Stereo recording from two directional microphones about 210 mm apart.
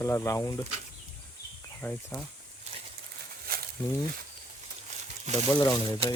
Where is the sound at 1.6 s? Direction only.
5° left (ahead or behind).